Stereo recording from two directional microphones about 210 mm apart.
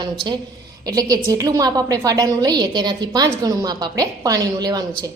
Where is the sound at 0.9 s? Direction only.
15° right (ahead or behind).